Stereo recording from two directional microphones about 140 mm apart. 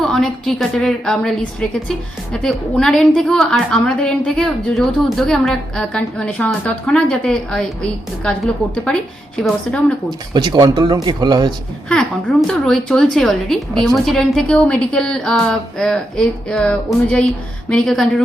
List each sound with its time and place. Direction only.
0.0 s a woman's voice: centre (ahead or behind)
2.3 s a woman's voice: 5° left (ahead or behind)
10.1 s speech: 30° right (ahead or behind)
11.9 s a woman's voice: 5° left (ahead or behind)